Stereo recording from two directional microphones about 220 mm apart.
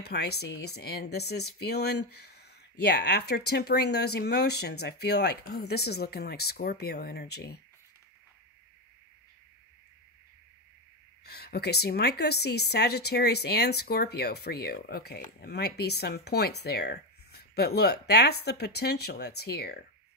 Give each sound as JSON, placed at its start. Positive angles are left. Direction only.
{"t": 0.0, "sound": "speech", "side_deg": 45}
{"t": 11.2, "sound": "speech", "side_deg": 45}